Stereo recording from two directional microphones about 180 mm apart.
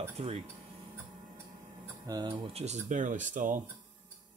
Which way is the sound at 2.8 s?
45° right (ahead or behind).